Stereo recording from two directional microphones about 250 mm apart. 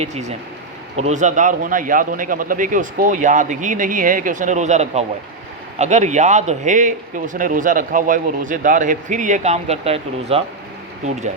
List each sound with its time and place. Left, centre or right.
0.0 s a man's voice: right